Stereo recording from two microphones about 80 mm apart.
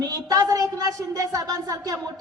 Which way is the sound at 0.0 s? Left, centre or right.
Right.